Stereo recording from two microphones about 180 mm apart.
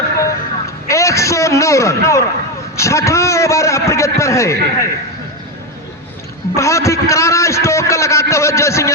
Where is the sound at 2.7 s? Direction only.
15° left (ahead or behind).